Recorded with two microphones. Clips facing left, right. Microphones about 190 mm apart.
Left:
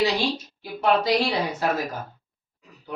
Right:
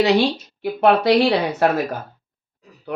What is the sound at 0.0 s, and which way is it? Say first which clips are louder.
Speech: right 7 dB; 65° right (ahead or behind).